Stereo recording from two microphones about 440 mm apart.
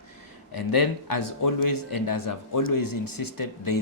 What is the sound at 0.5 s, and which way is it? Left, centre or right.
Speech, left.